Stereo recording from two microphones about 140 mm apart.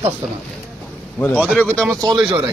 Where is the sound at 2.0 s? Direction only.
30° right (ahead or behind).